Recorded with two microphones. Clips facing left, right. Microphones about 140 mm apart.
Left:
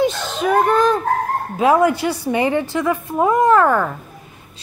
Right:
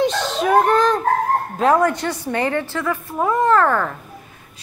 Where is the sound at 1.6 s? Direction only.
10° left (ahead or behind).